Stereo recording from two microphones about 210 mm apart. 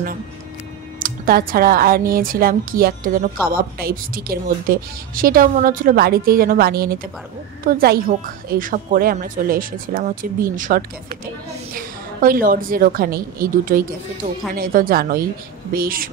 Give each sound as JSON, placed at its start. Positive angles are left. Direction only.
{"t": 0.9, "sound": "a woman's voice", "side_deg": -40}